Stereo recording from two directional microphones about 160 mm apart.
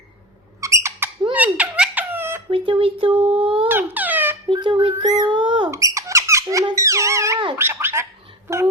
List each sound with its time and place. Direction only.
0.6 s mouse: 20° right (ahead or behind)
1.3 s baby laughter: 10° right (ahead or behind)
2.5 s a child's voice: 35° right (ahead or behind)
3.7 s squeak: 10° right (ahead or behind)
4.4 s a child's voice: 30° right (ahead or behind)
5.7 s squeak: 20° right (ahead or behind)
7.5 s gargling: 15° right (ahead or behind)
8.4 s a sound: 15° right (ahead or behind)